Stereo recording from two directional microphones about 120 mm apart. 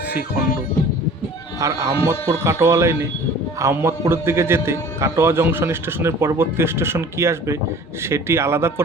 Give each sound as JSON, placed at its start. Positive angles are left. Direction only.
{"t": 1.5, "sound": "a man's voice", "side_deg": -25}